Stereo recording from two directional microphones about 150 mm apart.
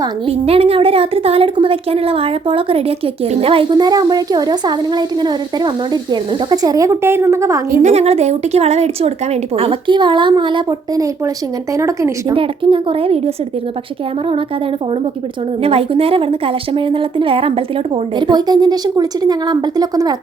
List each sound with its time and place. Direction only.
0.3 s a woman's voice: 40° right (ahead or behind); by 7.6 s 20° right (ahead or behind)
7.8 s a woman's voice: 45° right (ahead or behind); by 12.1 s 20° right (ahead or behind)
12.3 s speech: 35° right (ahead or behind)
15.6 s speech: 40° right (ahead or behind)
18.2 s a woman's voice: 30° right (ahead or behind)